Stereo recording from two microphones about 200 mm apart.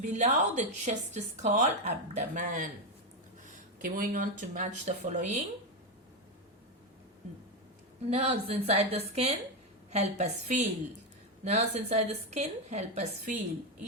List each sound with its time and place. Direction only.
0.0 s speech: 35° right (ahead or behind)
8.1 s speech: 30° right (ahead or behind)